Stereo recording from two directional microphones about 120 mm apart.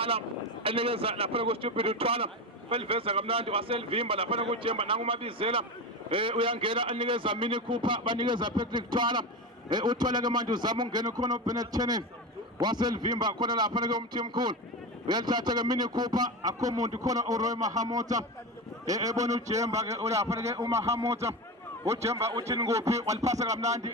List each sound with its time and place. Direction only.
0.6 s a man's voice: 50° right (ahead or behind); by 23.6 s 25° right (ahead or behind)
23.6 s music: 70° right (ahead or behind)